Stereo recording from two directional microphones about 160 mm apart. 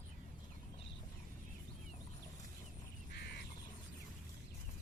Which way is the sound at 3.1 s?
90° left.